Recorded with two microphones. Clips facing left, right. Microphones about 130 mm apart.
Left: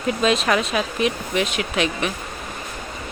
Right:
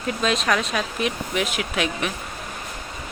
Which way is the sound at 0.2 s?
Centre (ahead or behind).